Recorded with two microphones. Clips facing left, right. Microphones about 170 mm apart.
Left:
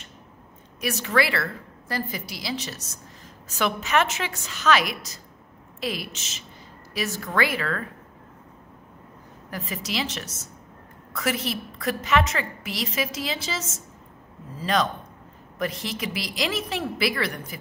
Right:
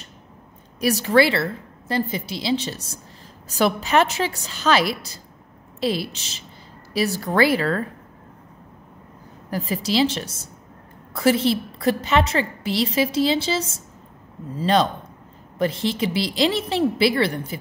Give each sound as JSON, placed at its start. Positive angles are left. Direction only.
{"t": 0.7, "sound": "a woman's voice", "side_deg": -35}
{"t": 9.5, "sound": "a woman's voice", "side_deg": -30}